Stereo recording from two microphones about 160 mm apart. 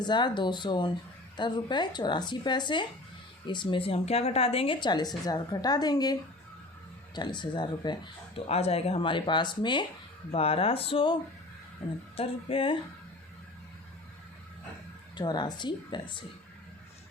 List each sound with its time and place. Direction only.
0.0 s speech: 30° left (ahead or behind)
7.2 s speech: 30° left (ahead or behind)
8.4 s speech: 40° left (ahead or behind)
15.1 s speech: 25° left (ahead or behind)